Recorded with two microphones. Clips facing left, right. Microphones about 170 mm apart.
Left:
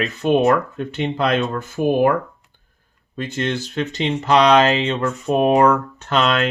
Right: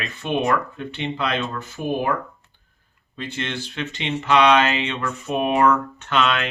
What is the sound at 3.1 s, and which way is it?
Speech, 45° left (ahead or behind).